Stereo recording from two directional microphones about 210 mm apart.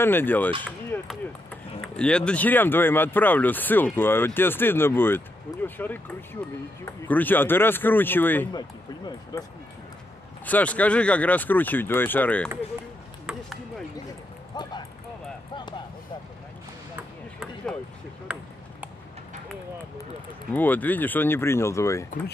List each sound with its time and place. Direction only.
0.0 s speech: 10° left (ahead or behind)
0.8 s a sound: 5° left (ahead or behind)
1.8 s speech: 5° left (ahead or behind)
13.3 s ping: 5° right (ahead or behind)
14.5 s a sound: 20° left (ahead or behind)
18.3 s speech: 5° right (ahead or behind)
20.5 s speech: 10° left (ahead or behind)